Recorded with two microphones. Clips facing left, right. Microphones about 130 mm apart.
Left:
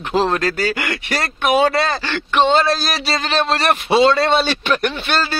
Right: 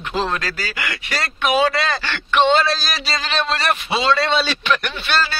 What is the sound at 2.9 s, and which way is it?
Speech, 30° left (ahead or behind).